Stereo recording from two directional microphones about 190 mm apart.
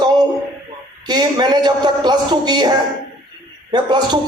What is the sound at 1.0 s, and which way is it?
A man's voice, 20° right (ahead or behind).